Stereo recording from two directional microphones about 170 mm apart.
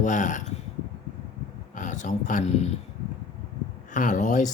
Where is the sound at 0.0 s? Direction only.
50° left (ahead or behind).